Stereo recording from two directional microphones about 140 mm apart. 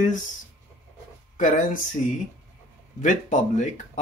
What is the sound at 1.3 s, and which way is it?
Speech, 65° left (ahead or behind).